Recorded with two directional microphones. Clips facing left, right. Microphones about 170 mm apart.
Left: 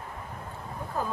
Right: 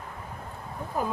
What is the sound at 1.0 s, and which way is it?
Speech, 15° right (ahead or behind).